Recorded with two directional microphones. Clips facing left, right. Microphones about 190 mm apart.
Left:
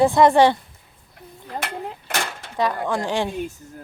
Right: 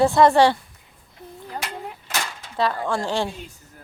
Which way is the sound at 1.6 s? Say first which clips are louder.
Left 3 dB; 55° left (ahead or behind).